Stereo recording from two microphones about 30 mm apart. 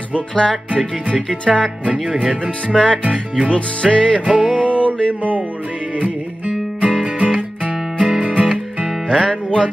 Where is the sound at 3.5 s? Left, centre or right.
Left.